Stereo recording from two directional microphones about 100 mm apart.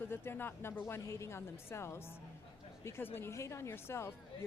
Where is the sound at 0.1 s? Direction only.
20° left (ahead or behind).